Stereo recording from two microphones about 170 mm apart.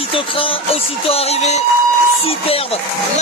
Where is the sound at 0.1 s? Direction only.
30° left (ahead or behind).